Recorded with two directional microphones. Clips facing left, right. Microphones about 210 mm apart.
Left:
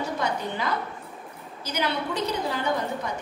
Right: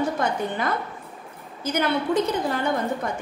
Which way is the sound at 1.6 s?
50° right (ahead or behind).